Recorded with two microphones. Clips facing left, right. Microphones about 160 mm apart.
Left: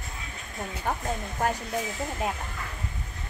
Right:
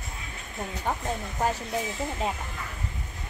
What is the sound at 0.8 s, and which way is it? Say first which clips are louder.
Speech: even; centre (ahead or behind).